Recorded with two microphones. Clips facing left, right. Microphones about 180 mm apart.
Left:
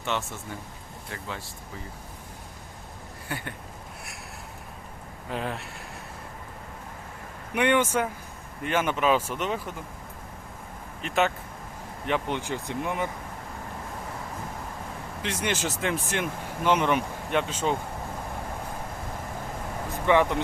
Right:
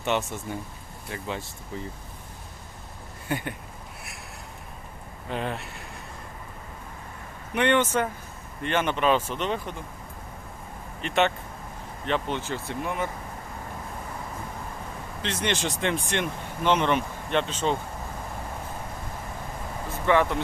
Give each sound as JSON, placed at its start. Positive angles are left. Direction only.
{"t": 0.0, "sound": "speech", "side_deg": -20}
{"t": 3.2, "sound": "speech", "side_deg": -20}
{"t": 5.3, "sound": "speech", "side_deg": 0}
{"t": 7.5, "sound": "speech", "side_deg": 10}
{"t": 11.0, "sound": "speech", "side_deg": 0}
{"t": 12.0, "sound": "speech", "side_deg": 15}
{"t": 15.2, "sound": "speech", "side_deg": 10}
{"t": 20.1, "sound": "speech", "side_deg": 15}